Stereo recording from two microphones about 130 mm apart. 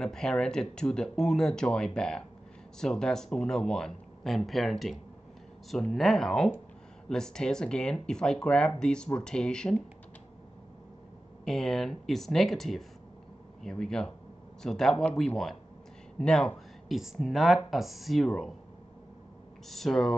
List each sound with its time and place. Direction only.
0.0 s speech: 5° left (ahead or behind)
11.4 s speech: 5° left (ahead or behind)
19.7 s speech: centre (ahead or behind)